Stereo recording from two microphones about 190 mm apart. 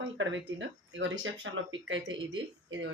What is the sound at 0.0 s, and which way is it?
Speech, 90° right.